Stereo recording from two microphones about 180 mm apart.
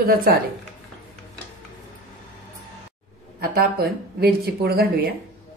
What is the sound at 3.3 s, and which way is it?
Speech, 55° right (ahead or behind).